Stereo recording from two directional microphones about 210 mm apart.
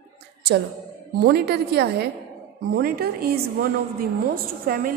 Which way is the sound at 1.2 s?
50° right (ahead or behind).